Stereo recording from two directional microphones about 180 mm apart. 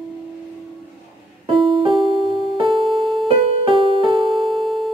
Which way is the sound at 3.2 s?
30° right (ahead or behind).